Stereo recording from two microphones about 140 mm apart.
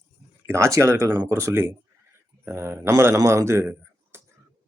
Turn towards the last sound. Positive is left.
turn(degrees=-15)  # may be behind; listen again after turning